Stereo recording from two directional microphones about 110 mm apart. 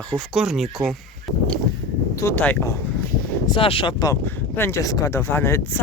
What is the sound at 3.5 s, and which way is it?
Speech, 55° left (ahead or behind).